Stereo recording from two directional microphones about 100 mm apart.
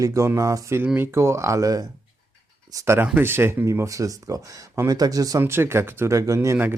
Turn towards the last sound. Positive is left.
turn(degrees=-30)  # may be behind; listen again after turning